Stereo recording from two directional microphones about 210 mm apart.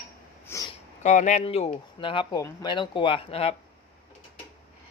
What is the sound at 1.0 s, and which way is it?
Speech, 35° left (ahead or behind).